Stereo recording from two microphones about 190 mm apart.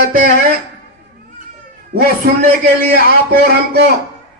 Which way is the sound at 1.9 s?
55° right (ahead or behind).